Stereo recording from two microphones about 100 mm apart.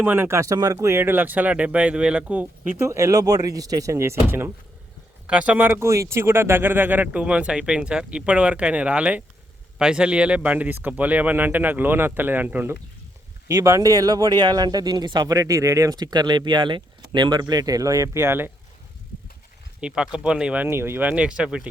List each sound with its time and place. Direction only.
0.0 s speech: 20° right (ahead or behind)
5.2 s speech: 15° right (ahead or behind)
13.5 s speech: 35° right (ahead or behind)
19.8 s speech: 10° right (ahead or behind)